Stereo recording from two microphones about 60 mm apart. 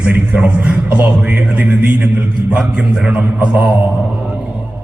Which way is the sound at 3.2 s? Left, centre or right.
Right.